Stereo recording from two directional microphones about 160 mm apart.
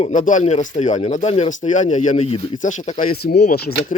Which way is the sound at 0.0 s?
50° left (ahead or behind).